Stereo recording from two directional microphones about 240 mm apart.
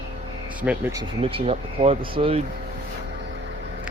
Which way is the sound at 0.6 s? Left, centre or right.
Centre.